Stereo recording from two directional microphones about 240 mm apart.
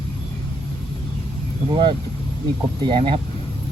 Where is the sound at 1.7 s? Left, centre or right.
Right.